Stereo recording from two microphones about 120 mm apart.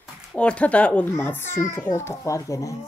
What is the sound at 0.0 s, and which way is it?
A woman's voice, 5° left (ahead or behind).